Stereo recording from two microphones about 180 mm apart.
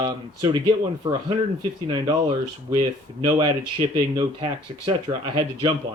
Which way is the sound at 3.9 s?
25° right (ahead or behind).